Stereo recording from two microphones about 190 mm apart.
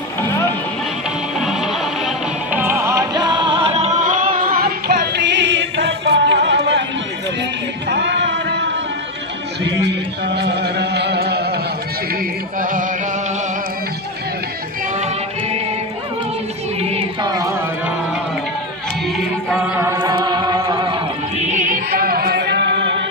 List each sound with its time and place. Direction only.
0.2 s music: 15° left (ahead or behind)
1.4 s music: centre (ahead or behind)
2.6 s music: 15° right (ahead or behind); by 6.8 s 65° right (ahead or behind)
7.9 s music: 65° right (ahead or behind)
12.2 s music: 45° right (ahead or behind)
16.8 s a sound: 30° right (ahead or behind)
19.5 s chant: 10° right (ahead or behind)
20.0 s music: 25° right (ahead or behind)
21.4 s music: 40° right (ahead or behind); by 23.0 s 70° right (ahead or behind)